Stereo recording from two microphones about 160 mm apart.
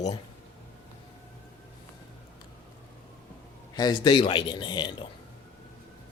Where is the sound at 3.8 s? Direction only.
25° left (ahead or behind).